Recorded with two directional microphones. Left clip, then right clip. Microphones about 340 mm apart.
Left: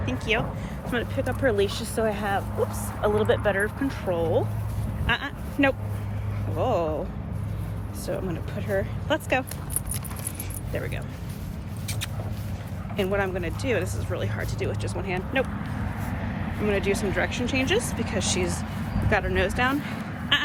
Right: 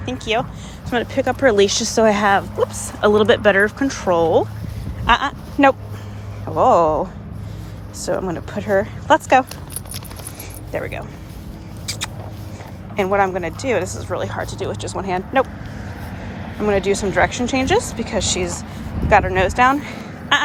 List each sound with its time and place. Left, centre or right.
0.0 s speech: centre
4.2 s speech: right
5.0 s a sound: centre
6.6 s speech: centre
8.0 s speech: centre
10.7 s speech: centre
11.9 s vehicle: centre
13.0 s speech: centre
16.6 s speech: centre